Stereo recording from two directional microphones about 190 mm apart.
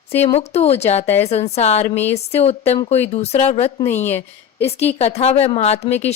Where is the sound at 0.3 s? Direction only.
35° left (ahead or behind).